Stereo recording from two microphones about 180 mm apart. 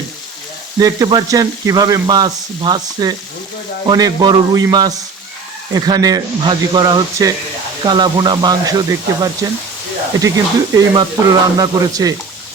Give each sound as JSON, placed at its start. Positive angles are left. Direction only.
{"t": 0.8, "sound": "speech", "side_deg": -20}